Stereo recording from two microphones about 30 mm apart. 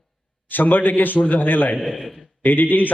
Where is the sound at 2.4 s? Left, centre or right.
Left.